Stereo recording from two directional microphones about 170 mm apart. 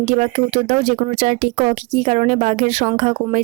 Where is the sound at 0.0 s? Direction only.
40° right (ahead or behind).